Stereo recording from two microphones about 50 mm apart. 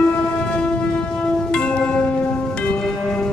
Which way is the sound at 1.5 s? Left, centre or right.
Centre.